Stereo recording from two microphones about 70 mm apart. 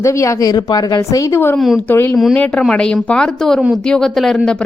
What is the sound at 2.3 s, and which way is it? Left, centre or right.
A woman's voice, centre.